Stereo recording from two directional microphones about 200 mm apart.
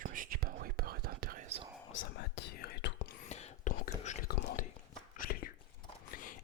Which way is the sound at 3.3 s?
35° left (ahead or behind).